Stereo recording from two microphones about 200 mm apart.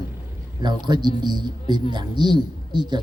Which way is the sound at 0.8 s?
20° right (ahead or behind).